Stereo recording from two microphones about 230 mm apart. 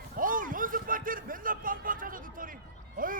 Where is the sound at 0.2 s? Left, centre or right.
Right.